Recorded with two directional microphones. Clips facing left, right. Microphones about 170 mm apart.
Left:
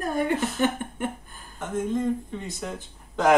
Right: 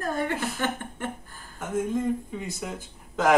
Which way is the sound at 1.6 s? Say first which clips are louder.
Even; 5° right (ahead or behind).